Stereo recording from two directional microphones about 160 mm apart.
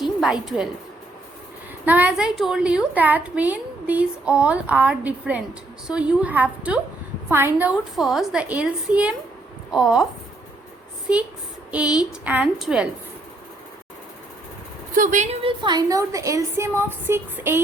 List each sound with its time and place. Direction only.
0.0 s a woman's voice: 5° right (ahead or behind)
1.8 s a woman's voice: 10° right (ahead or behind)
12.2 s a woman's voice: 10° right (ahead or behind)
14.9 s speech: 55° right (ahead or behind)
15.4 s a woman's voice: 30° right (ahead or behind)